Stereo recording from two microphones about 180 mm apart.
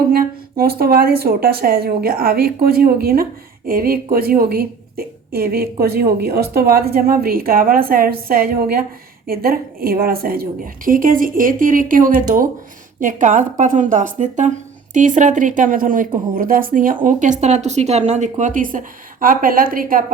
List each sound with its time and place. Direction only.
0.1 s speech: 55° right (ahead or behind)